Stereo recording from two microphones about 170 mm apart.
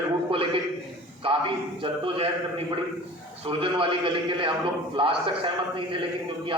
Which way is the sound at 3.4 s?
30° right (ahead or behind).